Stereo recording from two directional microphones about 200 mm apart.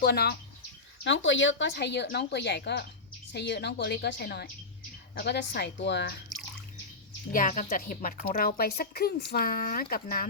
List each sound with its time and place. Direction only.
0.0 s a woman's voice: 55° left (ahead or behind)
1.0 s speech: 70° left (ahead or behind)
7.3 s a woman's voice: 40° left (ahead or behind)